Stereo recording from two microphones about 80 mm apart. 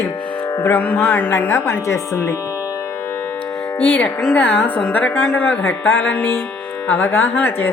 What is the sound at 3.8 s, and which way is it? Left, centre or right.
A woman's voice, left.